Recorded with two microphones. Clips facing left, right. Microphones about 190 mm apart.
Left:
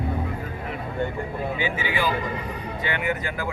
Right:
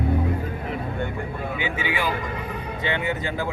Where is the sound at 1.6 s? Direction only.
15° right (ahead or behind).